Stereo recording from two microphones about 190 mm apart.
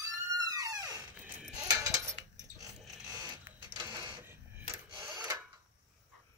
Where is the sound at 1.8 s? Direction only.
15° right (ahead or behind).